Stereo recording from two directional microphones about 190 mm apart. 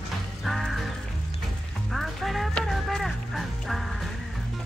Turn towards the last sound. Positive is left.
turn(degrees=0)  # may be behind; listen again after turning